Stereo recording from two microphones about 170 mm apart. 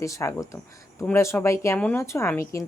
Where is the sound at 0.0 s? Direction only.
20° left (ahead or behind).